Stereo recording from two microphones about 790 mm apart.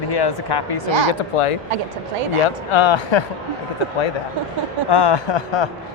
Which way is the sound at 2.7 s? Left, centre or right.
Left.